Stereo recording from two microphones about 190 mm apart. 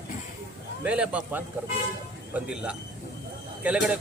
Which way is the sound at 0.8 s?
5° right (ahead or behind).